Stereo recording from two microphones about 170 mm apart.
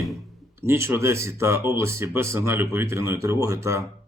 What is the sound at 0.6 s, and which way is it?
Speech, 15° right (ahead or behind).